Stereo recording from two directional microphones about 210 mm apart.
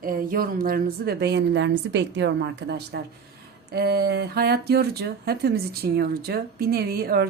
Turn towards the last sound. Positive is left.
turn(degrees=-45)  # may be behind; listen again after turning